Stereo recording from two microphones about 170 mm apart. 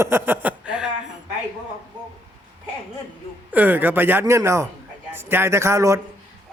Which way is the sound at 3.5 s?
10° right (ahead or behind).